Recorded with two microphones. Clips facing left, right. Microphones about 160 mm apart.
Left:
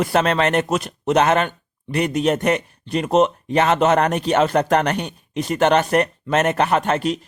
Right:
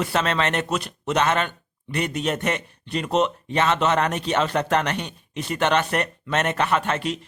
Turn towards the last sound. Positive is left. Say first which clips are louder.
# left 4 dB
turn(degrees=40)  # may be behind; listen again after turning